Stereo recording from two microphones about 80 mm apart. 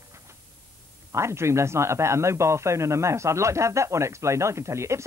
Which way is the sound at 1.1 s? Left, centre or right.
Right.